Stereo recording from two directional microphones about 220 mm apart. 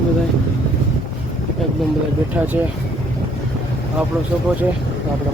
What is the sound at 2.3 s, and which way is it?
Speech, 5° right (ahead or behind).